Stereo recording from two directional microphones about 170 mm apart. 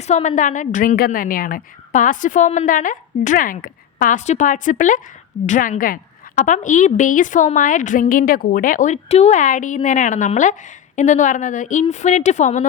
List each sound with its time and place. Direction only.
0.1 s a woman's voice: 45° left (ahead or behind)